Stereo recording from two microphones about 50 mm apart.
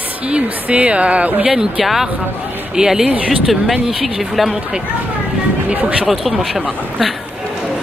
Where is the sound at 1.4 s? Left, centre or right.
Centre.